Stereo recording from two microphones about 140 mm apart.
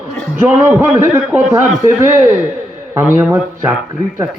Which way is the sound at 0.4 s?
15° right (ahead or behind).